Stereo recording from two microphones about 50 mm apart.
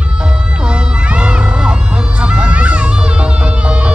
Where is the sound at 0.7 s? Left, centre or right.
Right.